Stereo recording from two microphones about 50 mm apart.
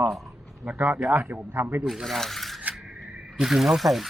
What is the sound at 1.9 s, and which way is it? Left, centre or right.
Speech, centre.